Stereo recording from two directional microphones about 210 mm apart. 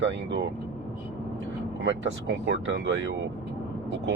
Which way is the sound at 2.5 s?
60° right (ahead or behind).